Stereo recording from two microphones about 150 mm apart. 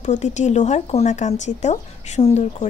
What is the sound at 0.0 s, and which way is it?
Speech, 50° left (ahead or behind).